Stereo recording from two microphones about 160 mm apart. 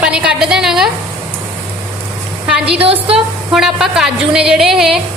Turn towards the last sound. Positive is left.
turn(degrees=0)  # may be behind; listen again after turning